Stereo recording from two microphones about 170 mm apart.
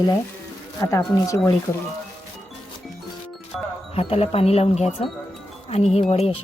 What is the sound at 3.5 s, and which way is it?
Music, centre (ahead or behind).